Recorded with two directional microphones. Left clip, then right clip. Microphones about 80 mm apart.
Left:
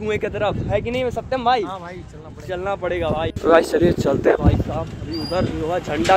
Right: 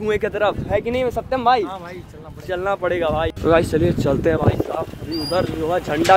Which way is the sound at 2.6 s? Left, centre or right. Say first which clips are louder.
Right 3 dB; right.